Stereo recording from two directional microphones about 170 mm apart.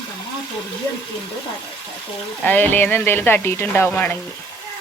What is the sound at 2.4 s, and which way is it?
Speech, 10° left (ahead or behind).